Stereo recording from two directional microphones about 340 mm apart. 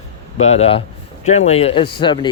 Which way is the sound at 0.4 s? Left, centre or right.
Centre.